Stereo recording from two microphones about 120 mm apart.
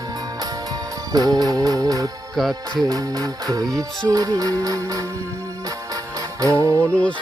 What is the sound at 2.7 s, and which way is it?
Music, 30° right (ahead or behind).